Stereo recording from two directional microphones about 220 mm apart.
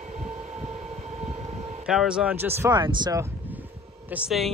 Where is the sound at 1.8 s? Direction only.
5° right (ahead or behind).